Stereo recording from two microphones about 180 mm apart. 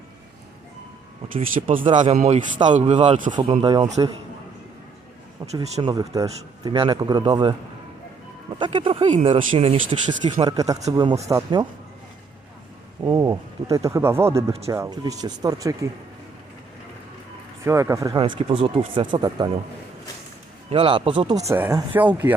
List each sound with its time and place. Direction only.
1.6 s speech: 30° right (ahead or behind)
1.9 s speech: 45° right (ahead or behind)
3.3 s speech: 25° right (ahead or behind)
5.6 s speech: 35° right (ahead or behind)
5.9 s speech: 20° right (ahead or behind)
8.5 s speech: 25° right (ahead or behind)
13.1 s speech: 15° right (ahead or behind)
17.7 s speech: 15° right (ahead or behind)
18.2 s speech: 30° right (ahead or behind)
20.7 s speech: 30° right (ahead or behind); by 22.4 s 10° right (ahead or behind)